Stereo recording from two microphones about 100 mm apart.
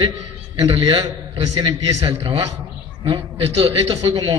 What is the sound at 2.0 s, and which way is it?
A man's voice, 65° right (ahead or behind).